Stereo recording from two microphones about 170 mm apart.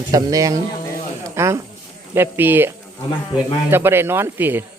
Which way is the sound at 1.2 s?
15° right (ahead or behind).